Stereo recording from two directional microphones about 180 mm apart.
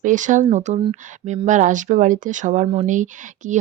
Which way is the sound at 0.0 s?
45° right (ahead or behind).